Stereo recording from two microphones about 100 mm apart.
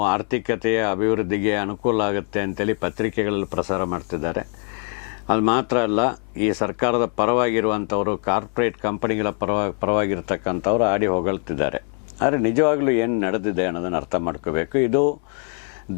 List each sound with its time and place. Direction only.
0.0 s speech: 15° left (ahead or behind)